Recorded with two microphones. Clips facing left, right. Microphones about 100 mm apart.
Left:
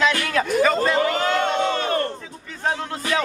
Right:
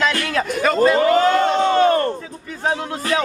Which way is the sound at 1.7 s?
35° right (ahead or behind).